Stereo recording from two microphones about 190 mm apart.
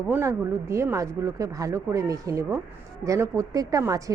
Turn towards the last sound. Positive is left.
turn(degrees=-15)  # may be behind; listen again after turning